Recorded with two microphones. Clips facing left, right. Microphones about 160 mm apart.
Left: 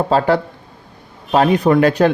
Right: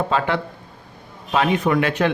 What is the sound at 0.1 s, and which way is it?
Speech, 35° left (ahead or behind).